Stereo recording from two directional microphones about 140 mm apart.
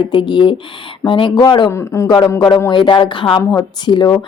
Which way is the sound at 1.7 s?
20° left (ahead or behind).